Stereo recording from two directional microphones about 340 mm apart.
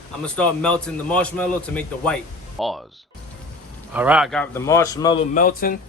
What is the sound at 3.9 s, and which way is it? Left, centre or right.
A man's voice, centre.